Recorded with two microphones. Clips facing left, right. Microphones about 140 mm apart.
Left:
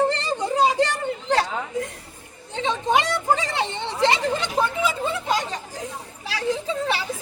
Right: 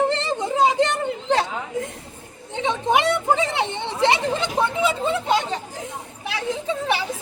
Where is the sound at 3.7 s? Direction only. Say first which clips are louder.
Even; 20° right (ahead or behind).